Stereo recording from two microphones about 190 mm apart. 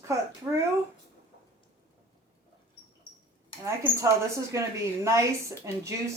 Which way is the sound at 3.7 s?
15° right (ahead or behind).